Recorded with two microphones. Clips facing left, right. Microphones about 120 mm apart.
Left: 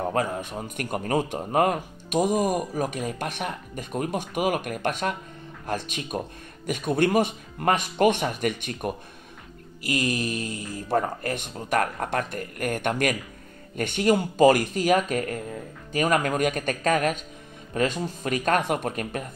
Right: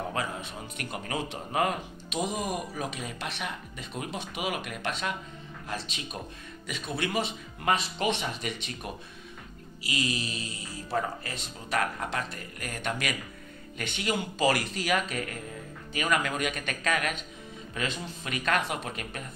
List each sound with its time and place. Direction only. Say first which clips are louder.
0.0 s speech: left 7 dB; 45° left (ahead or behind)